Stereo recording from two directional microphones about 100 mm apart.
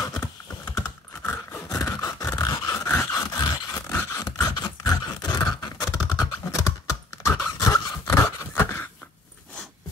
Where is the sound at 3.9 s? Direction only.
30° left (ahead or behind).